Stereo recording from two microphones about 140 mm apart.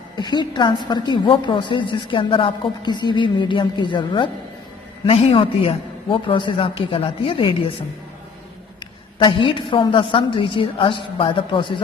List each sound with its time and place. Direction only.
0.2 s a woman's voice: 30° left (ahead or behind)
8.8 s a woman's voice: 35° left (ahead or behind)